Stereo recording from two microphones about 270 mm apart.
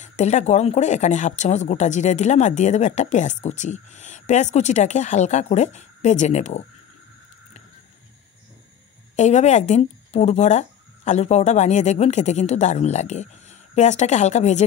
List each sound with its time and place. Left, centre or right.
0.0 s speech: left
9.1 s speech: left